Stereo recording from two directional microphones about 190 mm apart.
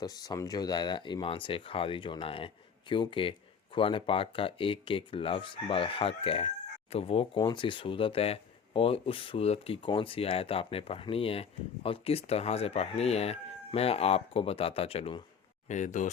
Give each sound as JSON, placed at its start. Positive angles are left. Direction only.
{"t": 0.0, "sound": "speech", "side_deg": 20}